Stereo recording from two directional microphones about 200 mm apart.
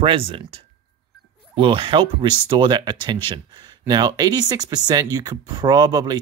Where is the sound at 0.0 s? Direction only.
25° right (ahead or behind).